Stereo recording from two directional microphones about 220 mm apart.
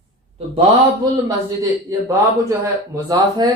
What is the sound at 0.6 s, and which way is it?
A man's voice, 20° right (ahead or behind).